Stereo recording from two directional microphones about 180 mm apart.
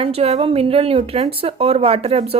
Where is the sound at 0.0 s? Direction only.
35° right (ahead or behind).